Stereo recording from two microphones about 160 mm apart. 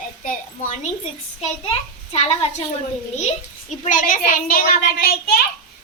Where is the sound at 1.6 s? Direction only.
40° left (ahead or behind).